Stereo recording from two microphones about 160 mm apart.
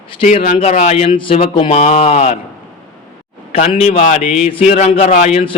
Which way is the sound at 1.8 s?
50° left (ahead or behind).